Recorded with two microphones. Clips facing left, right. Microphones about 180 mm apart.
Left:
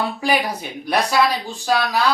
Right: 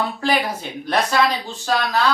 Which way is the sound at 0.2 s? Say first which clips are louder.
Even; 10° left (ahead or behind).